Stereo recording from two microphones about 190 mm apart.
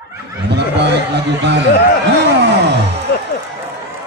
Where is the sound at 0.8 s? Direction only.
60° right (ahead or behind).